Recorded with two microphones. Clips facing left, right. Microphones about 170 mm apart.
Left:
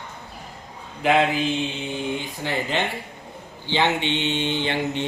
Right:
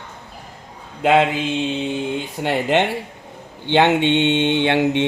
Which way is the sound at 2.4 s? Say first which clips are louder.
Right 8 dB; 70° right (ahead or behind).